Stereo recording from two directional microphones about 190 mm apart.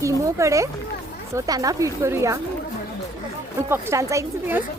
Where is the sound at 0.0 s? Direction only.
15° right (ahead or behind).